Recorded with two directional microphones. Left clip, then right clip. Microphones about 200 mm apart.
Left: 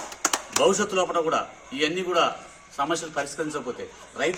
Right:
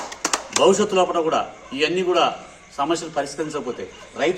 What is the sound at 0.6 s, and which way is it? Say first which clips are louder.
A man's voice: right 6 dB; 5° left (ahead or behind).